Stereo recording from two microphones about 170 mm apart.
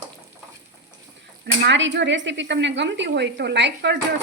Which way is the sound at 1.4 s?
90° right.